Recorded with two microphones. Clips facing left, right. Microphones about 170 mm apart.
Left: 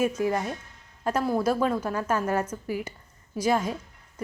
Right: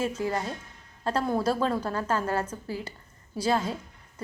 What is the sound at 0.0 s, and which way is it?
A woman's voice, 15° left (ahead or behind).